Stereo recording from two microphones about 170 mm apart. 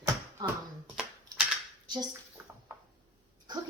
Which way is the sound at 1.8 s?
25° right (ahead or behind).